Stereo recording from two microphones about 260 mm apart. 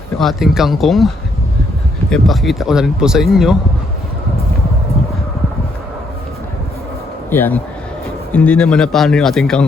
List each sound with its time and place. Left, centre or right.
0.2 s speech: centre
7.3 s speech: centre